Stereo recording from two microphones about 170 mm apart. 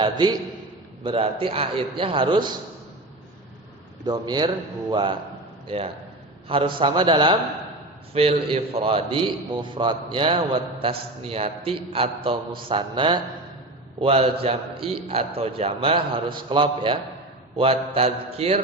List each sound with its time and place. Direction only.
0.0 s a man's voice: 25° right (ahead or behind)
4.0 s a man's voice: 25° right (ahead or behind)